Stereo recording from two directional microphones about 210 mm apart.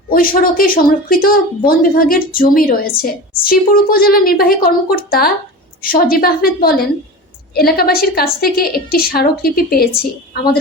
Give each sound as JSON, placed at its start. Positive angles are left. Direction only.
{"t": 0.1, "sound": "a woman's voice", "side_deg": 45}